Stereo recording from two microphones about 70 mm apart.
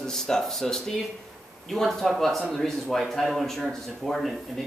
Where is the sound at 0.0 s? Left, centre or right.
Centre.